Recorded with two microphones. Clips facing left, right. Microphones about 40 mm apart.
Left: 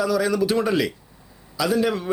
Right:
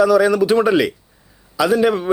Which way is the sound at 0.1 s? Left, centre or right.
Centre.